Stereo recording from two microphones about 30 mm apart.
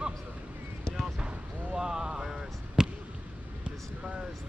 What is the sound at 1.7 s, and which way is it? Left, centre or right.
Basketball bounce, right.